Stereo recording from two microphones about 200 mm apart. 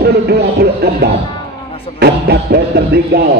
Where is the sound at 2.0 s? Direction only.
55° right (ahead or behind).